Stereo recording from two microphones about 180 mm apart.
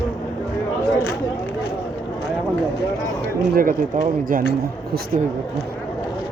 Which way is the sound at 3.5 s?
50° right (ahead or behind).